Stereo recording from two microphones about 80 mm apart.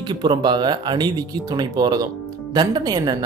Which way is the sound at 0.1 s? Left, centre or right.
Right.